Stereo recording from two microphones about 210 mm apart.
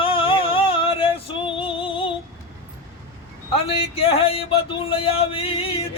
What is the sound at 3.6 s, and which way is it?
Music, 30° left (ahead or behind).